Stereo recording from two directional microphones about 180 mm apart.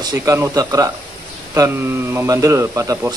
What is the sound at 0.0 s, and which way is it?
Speech, 15° right (ahead or behind).